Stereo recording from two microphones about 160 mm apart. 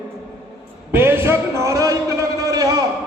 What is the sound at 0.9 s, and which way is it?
A man's voice, 15° right (ahead or behind).